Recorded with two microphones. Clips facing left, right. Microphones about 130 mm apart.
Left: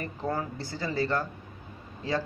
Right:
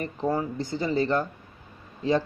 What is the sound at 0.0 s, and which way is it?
Speech, 20° right (ahead or behind).